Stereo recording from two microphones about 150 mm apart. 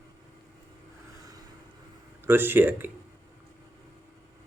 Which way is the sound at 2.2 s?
15° right (ahead or behind).